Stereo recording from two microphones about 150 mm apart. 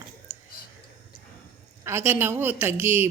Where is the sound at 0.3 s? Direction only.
15° right (ahead or behind).